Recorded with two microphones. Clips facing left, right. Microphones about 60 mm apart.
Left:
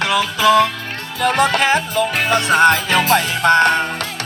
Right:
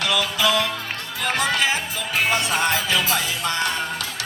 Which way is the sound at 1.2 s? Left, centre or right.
Left.